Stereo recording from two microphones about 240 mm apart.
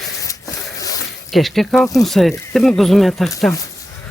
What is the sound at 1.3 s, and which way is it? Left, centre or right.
Speech, centre.